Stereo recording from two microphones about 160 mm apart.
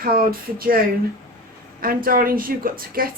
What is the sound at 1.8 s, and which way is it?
A woman's voice, 65° right (ahead or behind).